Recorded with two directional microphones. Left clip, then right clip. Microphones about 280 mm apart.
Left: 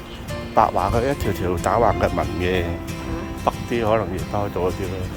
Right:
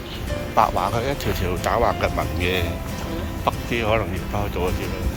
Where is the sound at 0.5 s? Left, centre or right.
Left.